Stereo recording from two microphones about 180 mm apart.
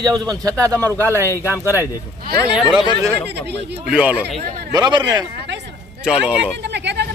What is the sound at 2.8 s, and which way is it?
Speech, 15° right (ahead or behind).